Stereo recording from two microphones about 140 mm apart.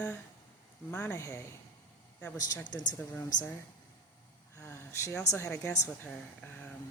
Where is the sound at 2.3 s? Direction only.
25° left (ahead or behind).